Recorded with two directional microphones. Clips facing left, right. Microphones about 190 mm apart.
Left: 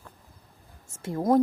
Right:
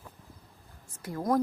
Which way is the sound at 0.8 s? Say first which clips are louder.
Left 5 dB; 25° left (ahead or behind).